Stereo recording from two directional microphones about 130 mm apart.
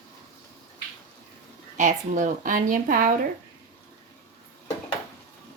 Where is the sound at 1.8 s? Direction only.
80° right.